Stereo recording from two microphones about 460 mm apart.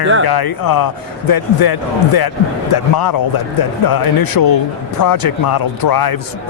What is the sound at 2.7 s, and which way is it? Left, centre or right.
Speech, left.